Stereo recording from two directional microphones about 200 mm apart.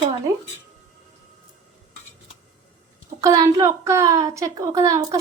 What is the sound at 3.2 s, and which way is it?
A woman's voice, 20° right (ahead or behind).